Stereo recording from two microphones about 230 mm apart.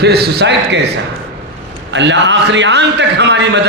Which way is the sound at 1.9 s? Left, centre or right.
Right.